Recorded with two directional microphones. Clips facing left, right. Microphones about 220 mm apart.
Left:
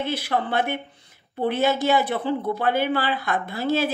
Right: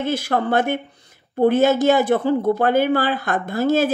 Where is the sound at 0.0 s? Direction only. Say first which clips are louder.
Right 4 dB; 45° right (ahead or behind).